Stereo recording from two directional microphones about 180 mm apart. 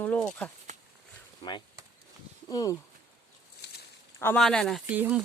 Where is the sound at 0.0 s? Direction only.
5° left (ahead or behind).